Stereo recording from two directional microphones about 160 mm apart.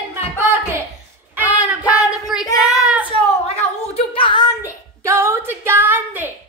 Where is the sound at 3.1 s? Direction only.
35° left (ahead or behind).